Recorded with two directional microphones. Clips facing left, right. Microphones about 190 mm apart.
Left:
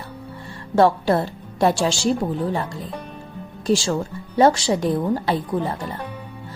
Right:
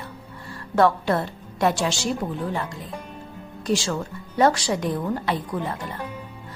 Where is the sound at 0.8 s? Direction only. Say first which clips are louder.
Left 3 dB; 30° left (ahead or behind).